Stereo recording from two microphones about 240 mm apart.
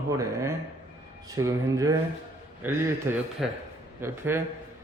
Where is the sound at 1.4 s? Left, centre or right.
Centre.